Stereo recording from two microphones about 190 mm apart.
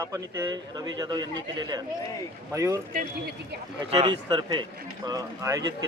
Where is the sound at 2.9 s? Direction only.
45° right (ahead or behind).